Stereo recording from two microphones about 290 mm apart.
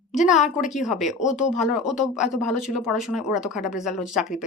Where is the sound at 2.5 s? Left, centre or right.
Left.